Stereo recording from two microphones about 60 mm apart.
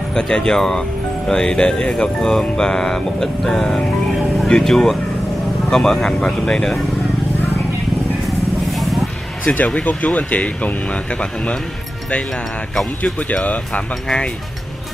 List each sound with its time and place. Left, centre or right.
0.1 s speech: centre
8.7 s a sound: centre
9.8 s speech: left
13.0 s speech: left